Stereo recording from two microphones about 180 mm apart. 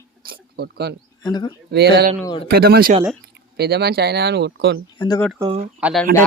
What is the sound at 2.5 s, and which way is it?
Speech, 60° right (ahead or behind).